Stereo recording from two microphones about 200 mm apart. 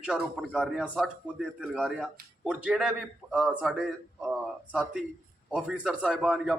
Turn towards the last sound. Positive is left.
turn(degrees=-5)  # may be behind; listen again after turning